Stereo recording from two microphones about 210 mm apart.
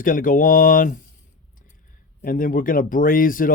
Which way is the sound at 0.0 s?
40° left (ahead or behind).